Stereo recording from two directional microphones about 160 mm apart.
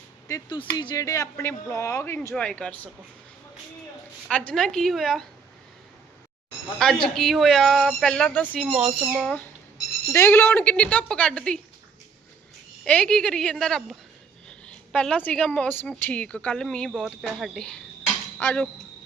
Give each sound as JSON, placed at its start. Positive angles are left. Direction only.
{"t": 0.3, "sound": "speech", "side_deg": 25}
{"t": 4.3, "sound": "a woman's voice", "side_deg": 5}
{"t": 6.7, "sound": "a woman's voice", "side_deg": 0}
{"t": 8.6, "sound": "speech", "side_deg": -5}
{"t": 9.2, "sound": "speech", "side_deg": 10}
{"t": 12.8, "sound": "a woman's voice", "side_deg": 5}
{"t": 18.0, "sound": "dishes", "side_deg": 10}